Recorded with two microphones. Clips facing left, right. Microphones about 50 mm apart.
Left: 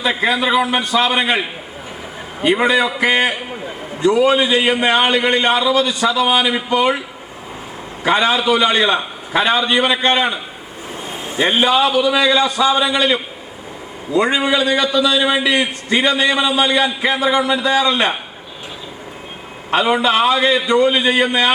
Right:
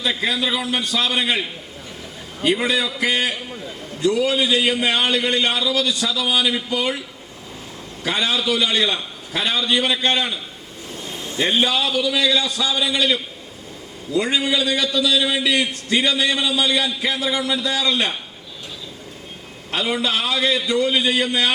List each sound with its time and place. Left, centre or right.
0.0 s a man's voice: left
8.0 s a man's voice: left
19.7 s a man's voice: left